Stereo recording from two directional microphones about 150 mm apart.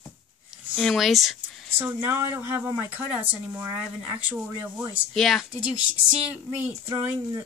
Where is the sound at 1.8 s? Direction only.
15° right (ahead or behind).